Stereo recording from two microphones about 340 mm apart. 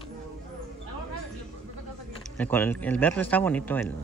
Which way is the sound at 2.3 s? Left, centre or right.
Centre.